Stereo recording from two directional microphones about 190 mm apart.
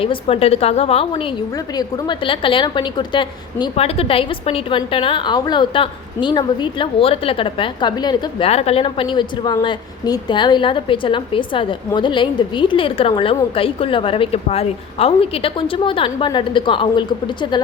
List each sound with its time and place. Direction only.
0.0 s a woman's voice: 30° left (ahead or behind)
1.5 s a woman's voice: 20° left (ahead or behind)